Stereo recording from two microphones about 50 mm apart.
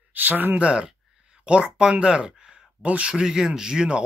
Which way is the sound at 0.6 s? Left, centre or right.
Centre.